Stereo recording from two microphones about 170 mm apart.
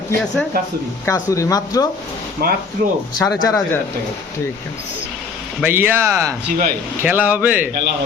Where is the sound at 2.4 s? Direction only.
65° right (ahead or behind).